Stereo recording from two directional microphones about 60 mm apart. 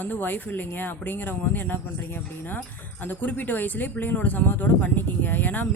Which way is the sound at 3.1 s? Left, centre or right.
Left.